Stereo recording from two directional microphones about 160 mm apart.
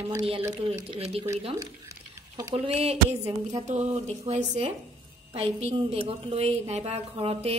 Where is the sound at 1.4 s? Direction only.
25° right (ahead or behind).